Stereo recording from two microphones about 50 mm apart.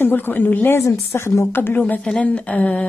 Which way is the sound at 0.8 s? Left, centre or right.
Left.